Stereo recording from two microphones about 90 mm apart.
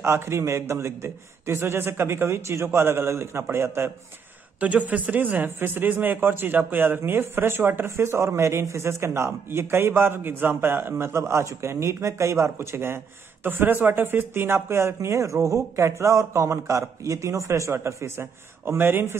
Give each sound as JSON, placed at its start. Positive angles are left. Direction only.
{"t": 0.0, "sound": "a man's voice", "side_deg": -30}
{"t": 4.6, "sound": "a man's voice", "side_deg": -15}